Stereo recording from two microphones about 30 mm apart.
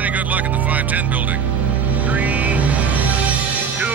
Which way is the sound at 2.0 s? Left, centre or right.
Right.